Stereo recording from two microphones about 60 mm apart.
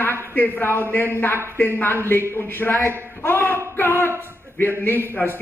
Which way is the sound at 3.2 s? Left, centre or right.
Left.